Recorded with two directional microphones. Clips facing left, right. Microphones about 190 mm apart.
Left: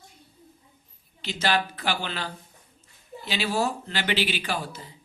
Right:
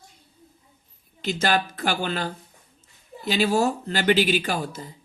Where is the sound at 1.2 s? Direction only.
45° right (ahead or behind).